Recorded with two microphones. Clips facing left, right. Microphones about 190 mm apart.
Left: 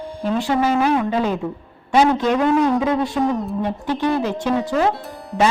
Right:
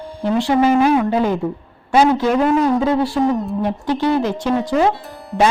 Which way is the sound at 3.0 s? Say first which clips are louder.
Right 3 dB; 5° right (ahead or behind).